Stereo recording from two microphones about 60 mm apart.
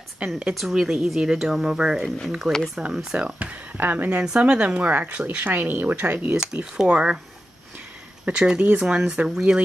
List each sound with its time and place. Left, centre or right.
0.2 s speech: centre
3.3 s speech: right
4.2 s speech: centre
5.4 s speech: right
6.3 s speech: centre
8.3 s speech: centre